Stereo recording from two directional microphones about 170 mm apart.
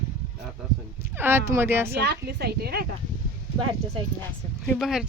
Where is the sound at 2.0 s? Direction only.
75° right (ahead or behind).